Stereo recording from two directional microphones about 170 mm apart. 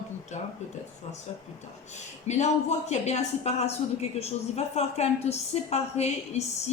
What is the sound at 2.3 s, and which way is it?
A woman's voice, 45° left (ahead or behind).